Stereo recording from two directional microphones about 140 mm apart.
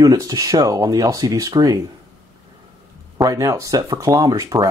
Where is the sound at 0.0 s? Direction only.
25° right (ahead or behind).